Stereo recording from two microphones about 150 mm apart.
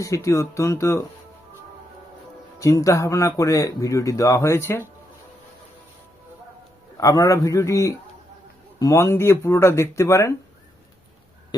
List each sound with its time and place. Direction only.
0.0 s speech: 20° left (ahead or behind)
2.6 s speech: 20° left (ahead or behind)
6.9 s speech: 25° left (ahead or behind)